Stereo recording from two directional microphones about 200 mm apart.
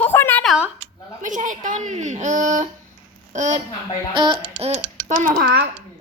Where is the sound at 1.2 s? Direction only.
40° right (ahead or behind).